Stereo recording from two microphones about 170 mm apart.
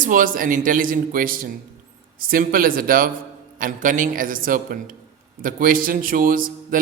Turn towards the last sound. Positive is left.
turn(degrees=-55)  # may be behind; listen again after turning